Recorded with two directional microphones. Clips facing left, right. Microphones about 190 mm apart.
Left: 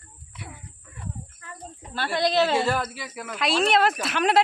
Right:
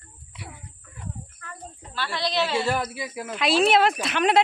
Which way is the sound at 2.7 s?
15° right (ahead or behind).